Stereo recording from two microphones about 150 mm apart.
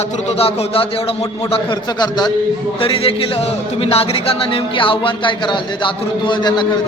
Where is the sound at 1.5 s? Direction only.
30° left (ahead or behind).